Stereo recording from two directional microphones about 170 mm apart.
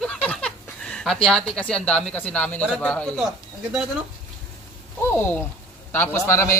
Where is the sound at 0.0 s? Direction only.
5° left (ahead or behind).